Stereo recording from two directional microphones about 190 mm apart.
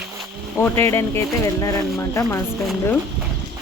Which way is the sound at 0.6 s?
10° left (ahead or behind).